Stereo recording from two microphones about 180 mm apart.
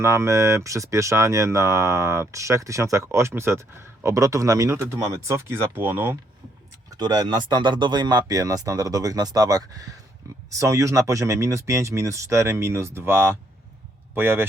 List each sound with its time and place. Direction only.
0.0 s speech: 15° right (ahead or behind)
6.9 s speech: 20° right (ahead or behind)